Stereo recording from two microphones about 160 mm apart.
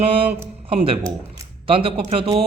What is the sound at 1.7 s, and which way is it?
Speech, 35° right (ahead or behind).